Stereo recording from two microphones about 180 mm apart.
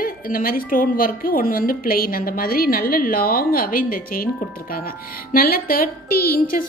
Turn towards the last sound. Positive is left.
turn(degrees=55)  # may be behind; listen again after turning